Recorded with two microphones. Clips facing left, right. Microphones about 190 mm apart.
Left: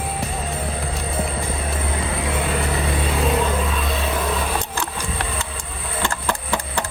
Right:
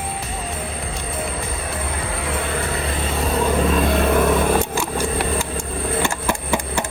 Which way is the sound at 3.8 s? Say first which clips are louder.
Right 7 dB; 55° right (ahead or behind).